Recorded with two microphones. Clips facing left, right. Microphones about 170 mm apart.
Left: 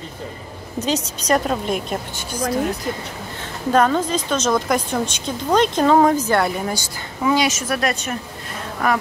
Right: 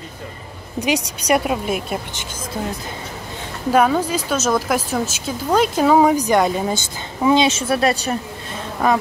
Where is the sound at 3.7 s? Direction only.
10° right (ahead or behind); by 8.2 s 30° right (ahead or behind).